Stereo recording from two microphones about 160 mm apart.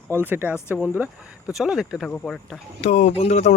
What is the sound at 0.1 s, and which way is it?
Speech, 15° right (ahead or behind).